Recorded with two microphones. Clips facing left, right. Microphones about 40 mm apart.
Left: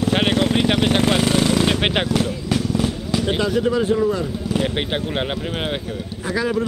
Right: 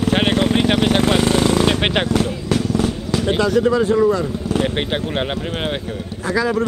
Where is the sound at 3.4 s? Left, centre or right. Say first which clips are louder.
Right 6 dB; centre.